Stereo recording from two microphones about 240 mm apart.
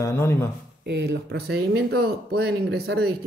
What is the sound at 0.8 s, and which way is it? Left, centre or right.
Speech, right.